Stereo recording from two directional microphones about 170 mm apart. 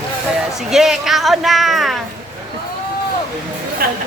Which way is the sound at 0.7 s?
Centre (ahead or behind).